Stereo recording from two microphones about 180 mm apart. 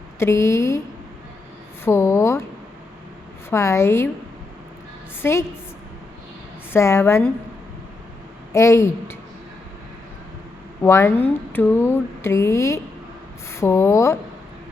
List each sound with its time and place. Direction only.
0.2 s speech: 15° left (ahead or behind)
1.8 s speech: 15° left (ahead or behind)
3.5 s speech: 15° left (ahead or behind)
5.2 s speech: 15° left (ahead or behind)
6.7 s speech: 15° left (ahead or behind)
8.5 s speech: 15° left (ahead or behind)
10.8 s speech: 15° left (ahead or behind)